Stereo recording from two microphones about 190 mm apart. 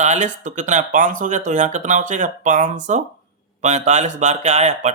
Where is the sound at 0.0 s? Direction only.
40° right (ahead or behind).